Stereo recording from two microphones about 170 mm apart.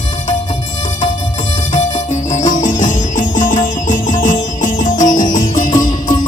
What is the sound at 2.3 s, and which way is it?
Music, 50° left (ahead or behind).